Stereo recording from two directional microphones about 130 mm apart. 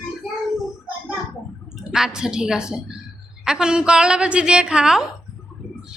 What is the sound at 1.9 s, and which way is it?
A woman's voice, 5° right (ahead or behind).